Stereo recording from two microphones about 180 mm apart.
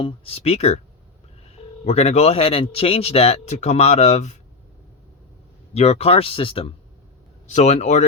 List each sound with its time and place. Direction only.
0.0 s speech: 30° left (ahead or behind)
1.8 s speech: 35° left (ahead or behind)
5.7 s speech: 35° left (ahead or behind)